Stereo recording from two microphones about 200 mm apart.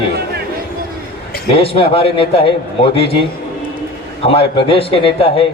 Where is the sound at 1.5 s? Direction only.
30° left (ahead or behind).